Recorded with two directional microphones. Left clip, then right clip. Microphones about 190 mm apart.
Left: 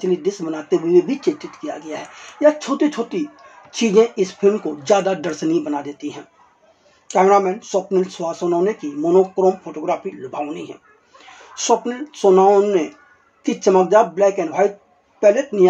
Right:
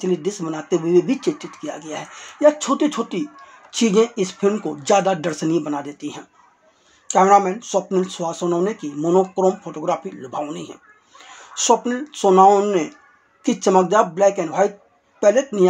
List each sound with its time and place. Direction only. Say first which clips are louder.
0.0 s speech: left 2 dB; 25° right (ahead or behind)